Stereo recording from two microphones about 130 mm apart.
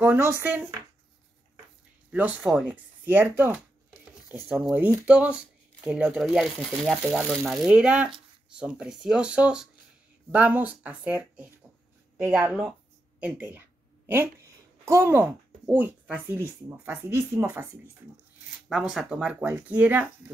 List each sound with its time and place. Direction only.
0.0 s speech: 15° right (ahead or behind)
2.0 s a woman's voice: 10° right (ahead or behind)
18.7 s speech: 5° right (ahead or behind)